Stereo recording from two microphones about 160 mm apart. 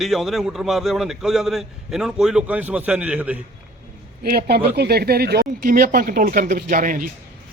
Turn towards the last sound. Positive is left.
turn(degrees=-60)  # may be behind; listen again after turning